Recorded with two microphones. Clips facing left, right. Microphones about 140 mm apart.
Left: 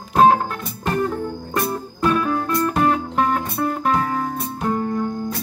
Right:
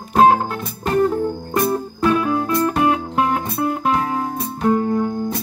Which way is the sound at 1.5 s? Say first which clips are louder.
Right 4 dB; 15° right (ahead or behind).